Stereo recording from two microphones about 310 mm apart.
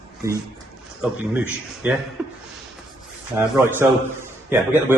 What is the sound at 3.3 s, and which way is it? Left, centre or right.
Speech, centre.